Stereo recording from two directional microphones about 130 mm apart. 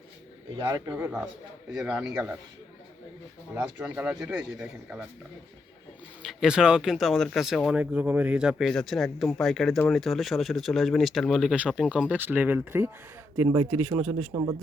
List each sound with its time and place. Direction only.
0.5 s speech: 25° right (ahead or behind)
0.9 s speech: 15° right (ahead or behind)
3.5 s speech: 15° right (ahead or behind)
6.2 s speech: 5° right (ahead or behind)
7.8 s speech: 10° right (ahead or behind)